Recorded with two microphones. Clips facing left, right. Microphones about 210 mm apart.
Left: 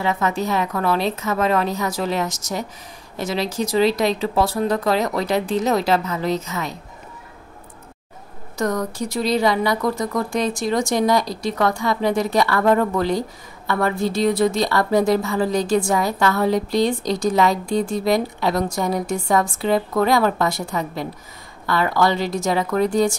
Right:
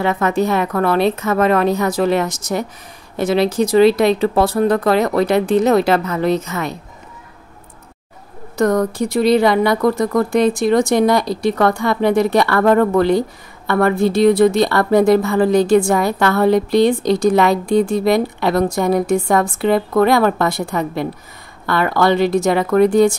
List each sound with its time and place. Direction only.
0.0 s speech: 60° right (ahead or behind)
8.5 s speech: 60° right (ahead or behind)